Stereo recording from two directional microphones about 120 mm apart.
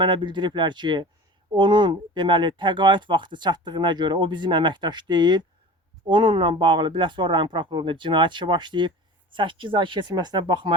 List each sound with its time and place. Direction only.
0.0 s speech: 40° right (ahead or behind)